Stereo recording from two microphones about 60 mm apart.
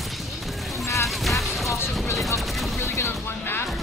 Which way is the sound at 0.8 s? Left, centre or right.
Left.